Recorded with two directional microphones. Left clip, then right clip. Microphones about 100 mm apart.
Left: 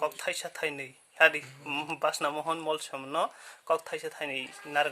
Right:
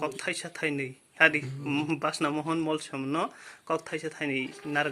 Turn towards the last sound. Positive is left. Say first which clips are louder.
# even
turn(degrees=40)  # may be behind; listen again after turning